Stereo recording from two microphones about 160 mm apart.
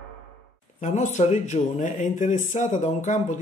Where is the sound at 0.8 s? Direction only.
50° left (ahead or behind).